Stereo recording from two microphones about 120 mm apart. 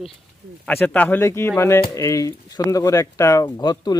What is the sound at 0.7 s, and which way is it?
Speech, 15° left (ahead or behind).